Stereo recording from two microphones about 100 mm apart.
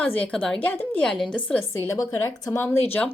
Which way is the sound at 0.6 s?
20° left (ahead or behind).